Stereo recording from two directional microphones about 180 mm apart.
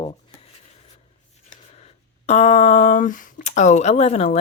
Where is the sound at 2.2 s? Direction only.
40° left (ahead or behind).